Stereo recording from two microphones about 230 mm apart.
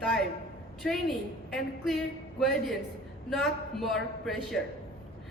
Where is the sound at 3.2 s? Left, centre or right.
Centre.